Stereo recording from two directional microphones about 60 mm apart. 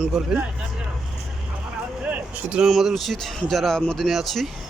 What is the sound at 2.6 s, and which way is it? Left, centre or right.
Speech, centre.